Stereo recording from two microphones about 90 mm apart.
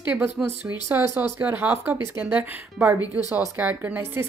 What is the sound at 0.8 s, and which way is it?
Speech, 25° right (ahead or behind).